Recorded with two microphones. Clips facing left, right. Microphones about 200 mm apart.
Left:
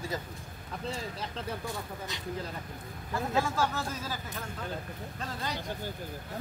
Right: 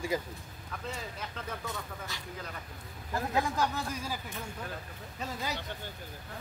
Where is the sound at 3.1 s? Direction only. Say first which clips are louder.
Left 1 dB; 15° right (ahead or behind).